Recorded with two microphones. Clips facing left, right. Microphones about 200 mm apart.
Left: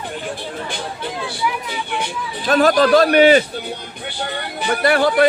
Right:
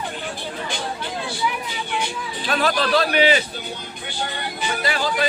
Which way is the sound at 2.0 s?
45° left (ahead or behind).